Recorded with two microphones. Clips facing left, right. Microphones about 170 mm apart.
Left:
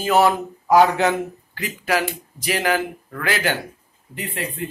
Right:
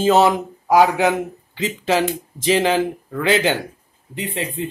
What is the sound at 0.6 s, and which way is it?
Speech, 10° right (ahead or behind).